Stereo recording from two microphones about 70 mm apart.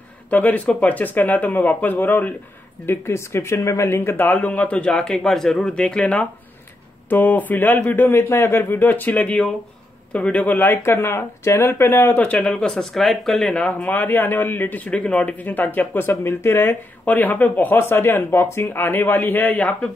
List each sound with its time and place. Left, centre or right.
0.3 s speech: left
2.9 s speech: left; by 5.0 s centre
5.0 s speech: centre
7.1 s speech: left
12.2 s speech: centre
13.5 s speech: centre
13.8 s speech: left
17.0 s speech: left